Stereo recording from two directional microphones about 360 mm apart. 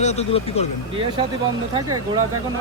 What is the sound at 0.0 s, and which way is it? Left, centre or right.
Speech, centre.